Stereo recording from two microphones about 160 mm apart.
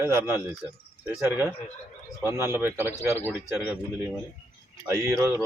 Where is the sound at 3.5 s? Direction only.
5° right (ahead or behind).